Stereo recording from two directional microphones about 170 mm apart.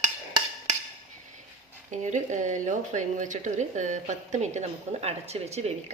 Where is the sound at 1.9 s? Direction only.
45° right (ahead or behind).